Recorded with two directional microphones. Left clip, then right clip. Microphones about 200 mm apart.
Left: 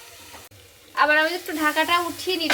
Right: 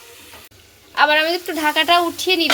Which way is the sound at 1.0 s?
50° right (ahead or behind).